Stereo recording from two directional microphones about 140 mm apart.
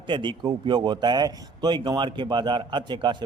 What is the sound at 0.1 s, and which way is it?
Speech, 35° right (ahead or behind).